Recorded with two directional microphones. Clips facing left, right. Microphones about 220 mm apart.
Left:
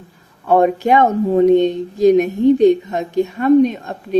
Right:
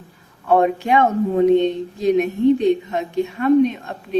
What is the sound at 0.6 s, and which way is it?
A woman's voice, 40° left (ahead or behind).